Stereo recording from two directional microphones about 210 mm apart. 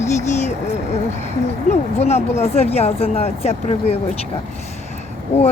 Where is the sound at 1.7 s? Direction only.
30° left (ahead or behind).